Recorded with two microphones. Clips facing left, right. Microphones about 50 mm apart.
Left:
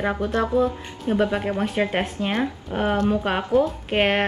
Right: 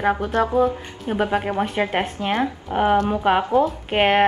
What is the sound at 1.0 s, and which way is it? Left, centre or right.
A woman's voice, centre.